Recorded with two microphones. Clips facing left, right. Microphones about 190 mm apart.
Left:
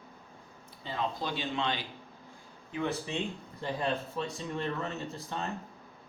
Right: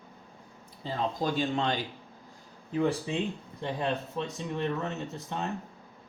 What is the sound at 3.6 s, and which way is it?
Speech, 20° right (ahead or behind).